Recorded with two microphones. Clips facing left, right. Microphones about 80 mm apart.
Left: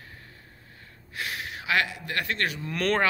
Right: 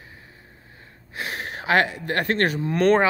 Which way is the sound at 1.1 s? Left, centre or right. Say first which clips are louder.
Right 3 dB; right.